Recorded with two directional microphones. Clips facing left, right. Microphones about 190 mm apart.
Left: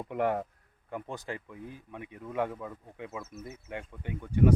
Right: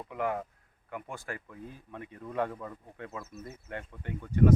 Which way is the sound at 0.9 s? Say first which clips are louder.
Left 3 dB; 30° left (ahead or behind).